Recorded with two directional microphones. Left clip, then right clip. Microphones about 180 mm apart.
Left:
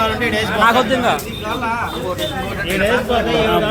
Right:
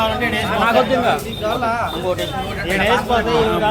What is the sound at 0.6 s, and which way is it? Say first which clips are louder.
Speech: left 2 dB; centre (ahead or behind).